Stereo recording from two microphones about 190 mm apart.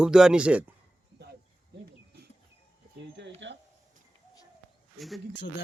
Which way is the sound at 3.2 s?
70° right (ahead or behind).